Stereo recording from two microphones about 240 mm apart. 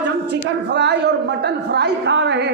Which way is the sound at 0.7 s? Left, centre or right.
Right.